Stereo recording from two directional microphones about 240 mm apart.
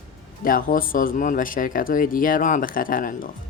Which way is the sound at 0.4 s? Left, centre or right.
Left.